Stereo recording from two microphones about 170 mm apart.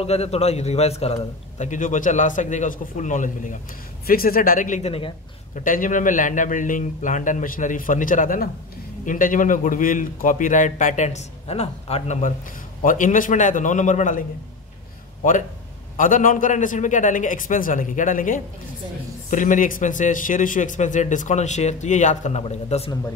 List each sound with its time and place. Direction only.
0.0 s a man's voice: 40° left (ahead or behind)
4.0 s a man's voice: 60° left (ahead or behind); by 5.1 s 35° left (ahead or behind)
5.5 s a man's voice: 50° left (ahead or behind)
16.0 s a man's voice: 50° left (ahead or behind)